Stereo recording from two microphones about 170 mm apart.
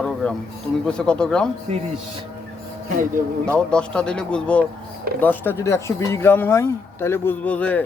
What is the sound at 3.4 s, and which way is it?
Speech, 5° left (ahead or behind).